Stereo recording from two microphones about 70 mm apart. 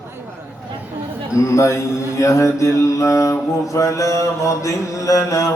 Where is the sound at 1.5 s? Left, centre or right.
Left.